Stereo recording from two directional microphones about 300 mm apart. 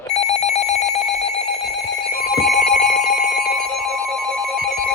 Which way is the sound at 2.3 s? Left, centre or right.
Centre.